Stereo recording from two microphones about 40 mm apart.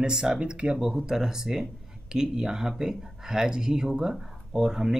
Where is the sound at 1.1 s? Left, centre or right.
Centre.